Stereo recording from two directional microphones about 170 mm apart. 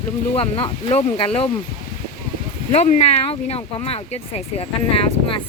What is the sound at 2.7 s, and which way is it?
Speech, 40° left (ahead or behind).